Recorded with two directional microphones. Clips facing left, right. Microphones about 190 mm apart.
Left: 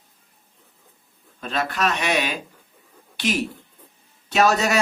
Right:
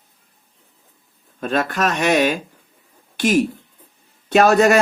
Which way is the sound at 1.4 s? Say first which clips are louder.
Right 5 dB; 50° right (ahead or behind).